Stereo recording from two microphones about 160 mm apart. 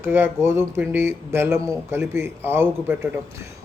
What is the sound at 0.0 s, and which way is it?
A man's voice, 15° right (ahead or behind).